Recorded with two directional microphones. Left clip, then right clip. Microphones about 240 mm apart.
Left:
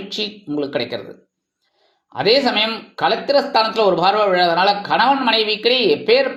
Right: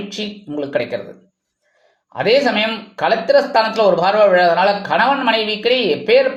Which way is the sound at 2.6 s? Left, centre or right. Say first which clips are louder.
Even; centre.